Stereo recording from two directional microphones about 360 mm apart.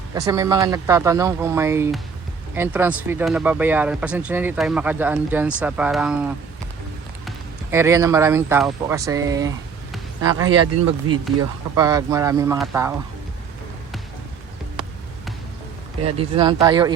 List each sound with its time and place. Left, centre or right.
0.1 s speech: centre
7.3 s speech: centre
10.4 s speech: right
11.7 s speech: centre
16.1 s speech: centre